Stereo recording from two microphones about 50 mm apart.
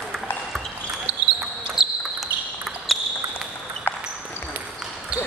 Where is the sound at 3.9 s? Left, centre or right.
Left.